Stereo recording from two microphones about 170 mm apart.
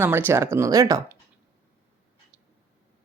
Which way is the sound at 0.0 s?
15° right (ahead or behind).